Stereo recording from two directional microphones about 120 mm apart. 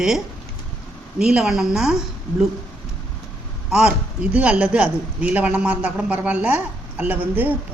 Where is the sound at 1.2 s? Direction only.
5° right (ahead or behind).